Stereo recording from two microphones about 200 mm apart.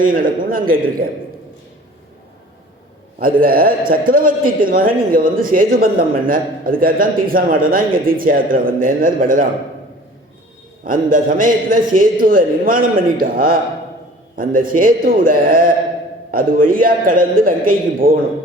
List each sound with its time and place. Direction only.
0.0 s a man's voice: 45° right (ahead or behind)
3.4 s a man's voice: 45° right (ahead or behind)
10.8 s a man's voice: 45° right (ahead or behind)